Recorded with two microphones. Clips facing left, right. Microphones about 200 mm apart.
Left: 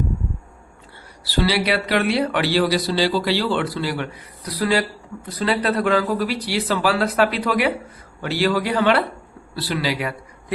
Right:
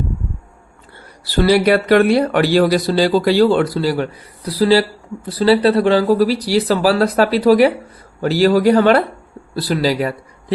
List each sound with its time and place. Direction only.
1.2 s speech: 50° right (ahead or behind)